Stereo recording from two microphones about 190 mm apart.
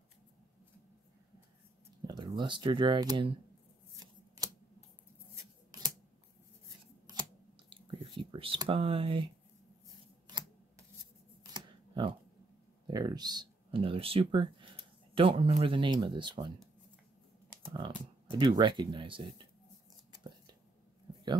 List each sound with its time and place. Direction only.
2.0 s speech: 25° right (ahead or behind)
4.4 s scissors: 20° right (ahead or behind)
7.1 s scissors: 20° right (ahead or behind)
7.7 s a sound: 25° right (ahead or behind)
11.5 s camera: 25° right (ahead or behind)
12.8 s speech: 20° right (ahead or behind)
17.7 s speech: 25° right (ahead or behind)